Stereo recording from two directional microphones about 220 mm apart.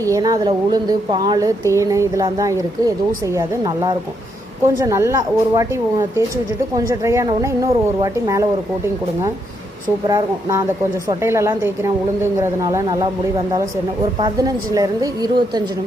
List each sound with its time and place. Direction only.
0.0 s a woman's voice: 15° right (ahead or behind)
10.1 s a woman's voice: 15° right (ahead or behind)
14.2 s a woman's voice: 20° right (ahead or behind)